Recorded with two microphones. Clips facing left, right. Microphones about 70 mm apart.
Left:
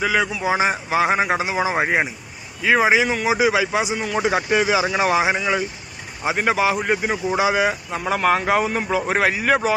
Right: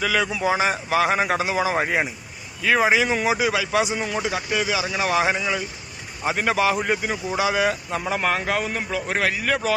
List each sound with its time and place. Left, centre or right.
0.0 s speech: centre
0.4 s a man's voice: centre
1.6 s a man's voice: centre
1.9 s a man's voice: centre